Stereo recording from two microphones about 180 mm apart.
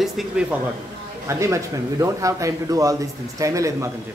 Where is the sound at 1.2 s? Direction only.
15° right (ahead or behind).